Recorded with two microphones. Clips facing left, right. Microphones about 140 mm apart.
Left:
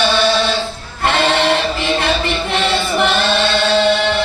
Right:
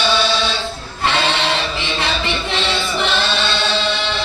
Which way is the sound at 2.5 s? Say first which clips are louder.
Left 6 dB; 50° left (ahead or behind).